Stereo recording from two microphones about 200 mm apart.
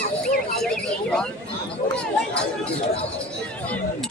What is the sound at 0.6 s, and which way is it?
Speech, 5° left (ahead or behind).